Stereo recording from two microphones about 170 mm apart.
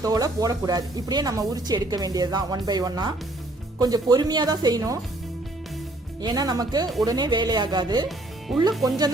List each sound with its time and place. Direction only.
0.0 s speech: 20° right (ahead or behind)
6.2 s speech: 25° right (ahead or behind)